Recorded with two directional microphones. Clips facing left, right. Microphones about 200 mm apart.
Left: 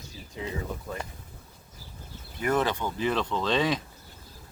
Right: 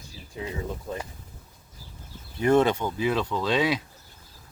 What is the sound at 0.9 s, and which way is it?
Speech, 20° right (ahead or behind).